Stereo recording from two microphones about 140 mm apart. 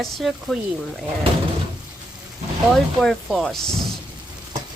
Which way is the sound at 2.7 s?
Centre (ahead or behind).